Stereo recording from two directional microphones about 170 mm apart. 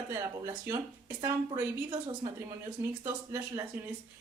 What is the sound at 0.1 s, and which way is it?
Speech, 15° right (ahead or behind).